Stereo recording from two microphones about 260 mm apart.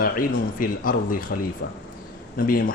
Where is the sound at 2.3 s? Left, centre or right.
Left.